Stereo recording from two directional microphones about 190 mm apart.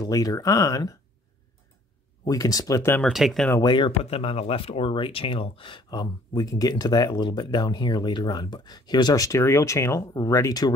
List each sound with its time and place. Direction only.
0.0 s speech: 20° left (ahead or behind)
2.2 s speech: 20° left (ahead or behind)
3.0 s speech: centre (ahead or behind)
3.4 s speech: 20° left (ahead or behind)